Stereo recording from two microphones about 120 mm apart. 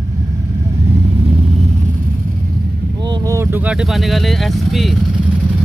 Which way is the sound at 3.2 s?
25° right (ahead or behind).